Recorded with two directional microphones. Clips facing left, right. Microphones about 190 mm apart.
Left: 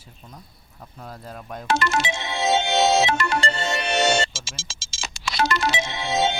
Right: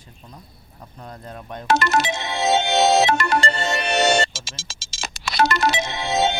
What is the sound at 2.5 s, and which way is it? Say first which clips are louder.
Music: right 2 dB; 60° right (ahead or behind).